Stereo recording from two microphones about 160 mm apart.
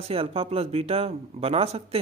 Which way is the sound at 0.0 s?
40° right (ahead or behind).